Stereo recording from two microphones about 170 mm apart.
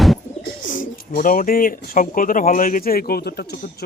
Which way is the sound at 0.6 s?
50° left (ahead or behind).